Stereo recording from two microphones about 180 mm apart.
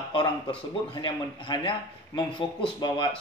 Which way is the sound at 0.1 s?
25° left (ahead or behind).